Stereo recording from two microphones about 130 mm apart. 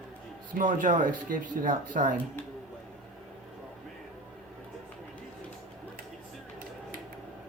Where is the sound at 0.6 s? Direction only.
90° right.